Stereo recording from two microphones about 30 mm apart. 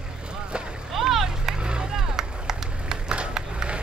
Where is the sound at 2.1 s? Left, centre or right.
Centre.